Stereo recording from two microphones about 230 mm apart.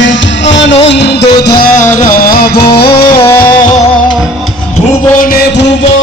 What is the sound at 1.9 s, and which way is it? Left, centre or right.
Music, left.